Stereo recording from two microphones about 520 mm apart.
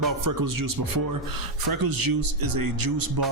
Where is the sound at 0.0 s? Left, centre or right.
Right.